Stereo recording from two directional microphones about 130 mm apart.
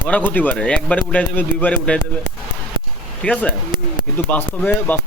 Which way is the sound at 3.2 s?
10° left (ahead or behind).